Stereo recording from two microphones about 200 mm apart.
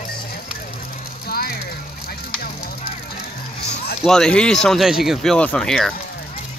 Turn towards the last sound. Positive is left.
turn(degrees=5)  # may be behind; listen again after turning